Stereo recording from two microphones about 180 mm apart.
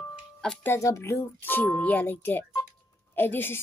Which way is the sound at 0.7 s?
15° left (ahead or behind).